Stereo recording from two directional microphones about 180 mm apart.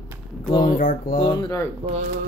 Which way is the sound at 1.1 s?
25° left (ahead or behind).